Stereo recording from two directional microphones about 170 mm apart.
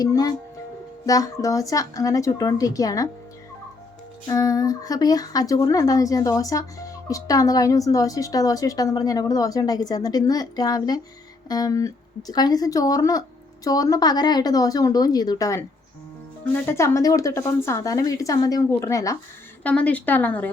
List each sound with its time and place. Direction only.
0.0 s speech: 20° left (ahead or behind)
4.3 s speech: 20° left (ahead or behind)